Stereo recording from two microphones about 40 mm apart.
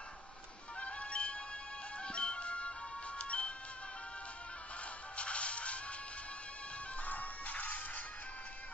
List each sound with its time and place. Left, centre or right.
0.7 s music: left
5.1 s music: left
7.1 s music: left